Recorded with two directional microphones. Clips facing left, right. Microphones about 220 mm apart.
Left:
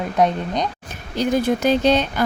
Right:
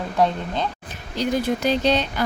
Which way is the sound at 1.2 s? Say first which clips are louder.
Left 3 dB; 50° left (ahead or behind).